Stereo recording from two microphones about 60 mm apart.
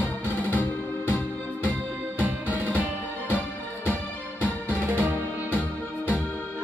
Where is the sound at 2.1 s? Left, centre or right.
Right.